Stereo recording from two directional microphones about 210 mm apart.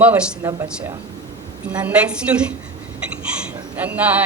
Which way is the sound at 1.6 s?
5° right (ahead or behind).